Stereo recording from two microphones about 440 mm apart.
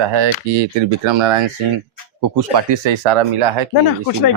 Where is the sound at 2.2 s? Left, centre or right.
Right.